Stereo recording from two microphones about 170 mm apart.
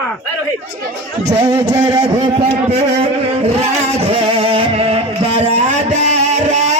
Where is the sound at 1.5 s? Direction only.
20° right (ahead or behind).